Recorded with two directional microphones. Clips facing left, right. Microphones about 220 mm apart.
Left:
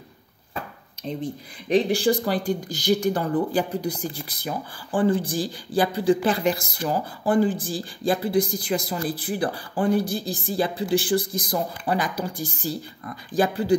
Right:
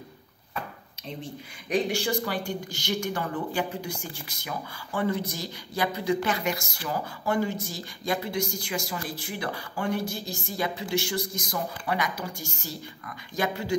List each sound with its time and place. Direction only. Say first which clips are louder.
1.0 s speech: left 8 dB; 35° left (ahead or behind)